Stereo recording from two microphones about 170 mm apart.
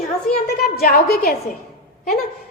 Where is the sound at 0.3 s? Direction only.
65° left (ahead or behind).